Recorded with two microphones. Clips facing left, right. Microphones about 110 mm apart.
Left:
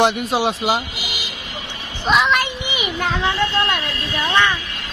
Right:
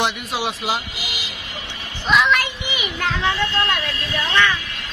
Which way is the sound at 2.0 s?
20° left (ahead or behind).